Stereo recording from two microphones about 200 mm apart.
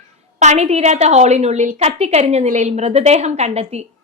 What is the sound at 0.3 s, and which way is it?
A woman's voice, 35° right (ahead or behind).